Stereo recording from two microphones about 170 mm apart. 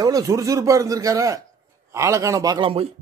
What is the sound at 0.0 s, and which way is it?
A man's voice, 20° right (ahead or behind).